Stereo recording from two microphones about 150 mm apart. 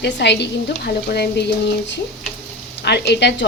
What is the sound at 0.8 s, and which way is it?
Speech, 90° left.